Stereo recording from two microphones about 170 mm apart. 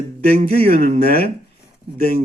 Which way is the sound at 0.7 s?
50° right (ahead or behind).